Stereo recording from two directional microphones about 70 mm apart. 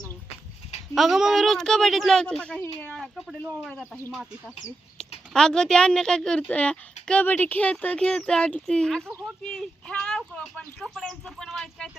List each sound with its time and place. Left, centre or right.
0.9 s a woman's voice: centre
2.2 s speech: centre
3.0 s a sound: centre
4.1 s a woman's voice: centre
4.9 s a woman's voice: centre